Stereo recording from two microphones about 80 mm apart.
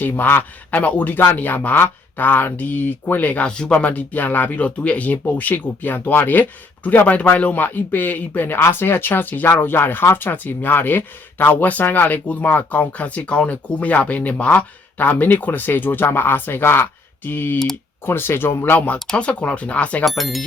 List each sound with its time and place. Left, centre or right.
0.0 s speech: left
18.9 s speech: centre
20.1 s speech: centre